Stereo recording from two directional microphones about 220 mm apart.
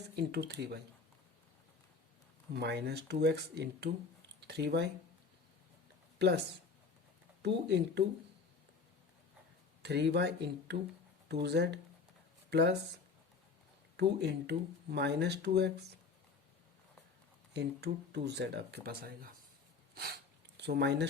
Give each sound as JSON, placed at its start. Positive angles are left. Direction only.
{"t": 0.2, "sound": "speech", "side_deg": -50}
{"t": 2.5, "sound": "speech", "side_deg": -50}
{"t": 6.1, "sound": "speech", "side_deg": -50}
{"t": 7.4, "sound": "speech", "side_deg": -50}
{"t": 9.8, "sound": "speech", "side_deg": -50}
{"t": 13.9, "sound": "speech", "side_deg": -50}
{"t": 17.5, "sound": "speech", "side_deg": -50}
{"t": 20.6, "sound": "speech", "side_deg": -50}